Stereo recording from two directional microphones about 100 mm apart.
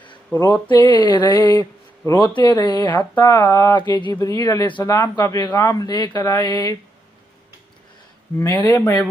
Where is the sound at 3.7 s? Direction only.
45° left (ahead or behind).